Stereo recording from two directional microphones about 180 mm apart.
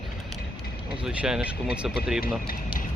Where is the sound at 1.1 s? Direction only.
5° right (ahead or behind).